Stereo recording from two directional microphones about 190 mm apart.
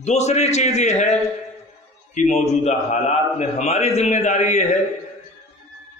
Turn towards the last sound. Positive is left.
turn(degrees=40)  # may be behind; listen again after turning